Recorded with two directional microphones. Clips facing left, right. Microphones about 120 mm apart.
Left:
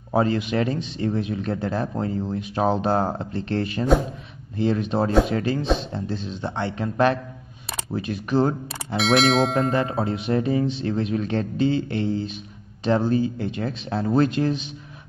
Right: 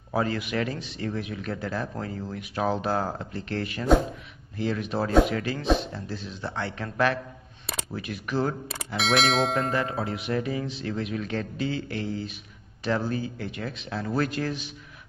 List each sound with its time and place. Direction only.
0.1 s speech: 25° left (ahead or behind)
8.6 s speech: centre (ahead or behind)
9.7 s speech: 25° left (ahead or behind)